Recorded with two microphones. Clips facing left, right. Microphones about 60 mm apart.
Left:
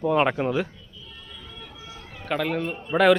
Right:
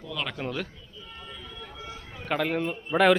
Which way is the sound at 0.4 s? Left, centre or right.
Centre.